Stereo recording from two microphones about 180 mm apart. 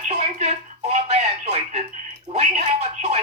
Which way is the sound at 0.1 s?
40° right (ahead or behind).